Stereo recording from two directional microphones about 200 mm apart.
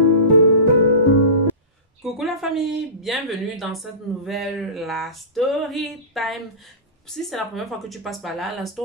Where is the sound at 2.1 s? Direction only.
Centre (ahead or behind).